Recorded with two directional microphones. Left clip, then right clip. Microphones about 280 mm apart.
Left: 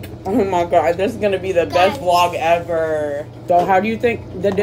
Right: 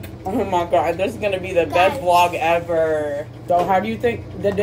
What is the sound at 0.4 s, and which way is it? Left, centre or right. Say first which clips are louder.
Speech: left 3 dB; left.